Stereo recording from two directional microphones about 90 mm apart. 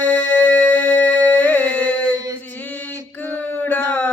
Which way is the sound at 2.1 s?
45° right (ahead or behind).